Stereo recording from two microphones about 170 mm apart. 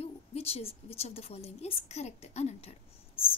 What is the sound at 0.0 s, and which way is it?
A woman's voice, 35° left (ahead or behind).